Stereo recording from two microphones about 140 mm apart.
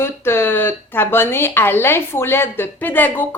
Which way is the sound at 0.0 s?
15° left (ahead or behind).